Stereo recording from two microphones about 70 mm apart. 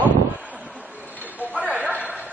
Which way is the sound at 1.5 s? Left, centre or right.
Centre.